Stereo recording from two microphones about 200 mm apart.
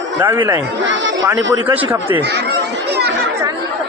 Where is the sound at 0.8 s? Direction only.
65° right (ahead or behind).